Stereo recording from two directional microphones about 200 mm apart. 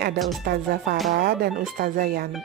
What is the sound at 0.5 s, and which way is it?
Speech, 50° right (ahead or behind).